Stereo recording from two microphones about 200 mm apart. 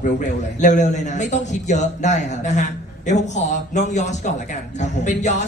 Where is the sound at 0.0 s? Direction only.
35° left (ahead or behind).